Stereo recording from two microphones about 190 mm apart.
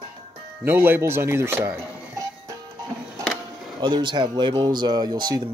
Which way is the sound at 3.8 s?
25° right (ahead or behind).